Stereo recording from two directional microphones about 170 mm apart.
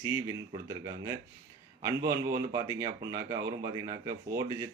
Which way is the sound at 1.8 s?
20° right (ahead or behind).